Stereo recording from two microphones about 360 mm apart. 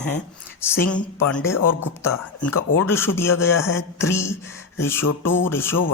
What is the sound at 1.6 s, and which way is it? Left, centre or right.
Speech, left.